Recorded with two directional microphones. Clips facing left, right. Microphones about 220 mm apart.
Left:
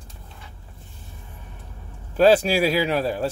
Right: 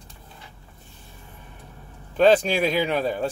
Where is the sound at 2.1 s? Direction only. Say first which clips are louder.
Left 1 dB; 5° left (ahead or behind).